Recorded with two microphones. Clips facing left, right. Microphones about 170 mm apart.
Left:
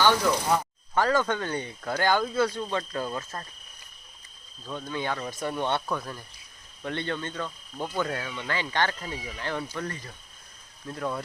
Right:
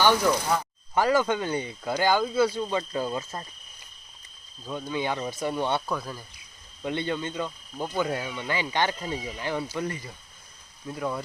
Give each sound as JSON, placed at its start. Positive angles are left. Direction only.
{"t": 0.9, "sound": "speech", "side_deg": -10}
{"t": 4.6, "sound": "speech", "side_deg": -10}
{"t": 9.0, "sound": "speech", "side_deg": -25}